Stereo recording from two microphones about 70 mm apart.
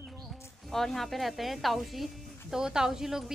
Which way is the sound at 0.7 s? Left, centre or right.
Centre.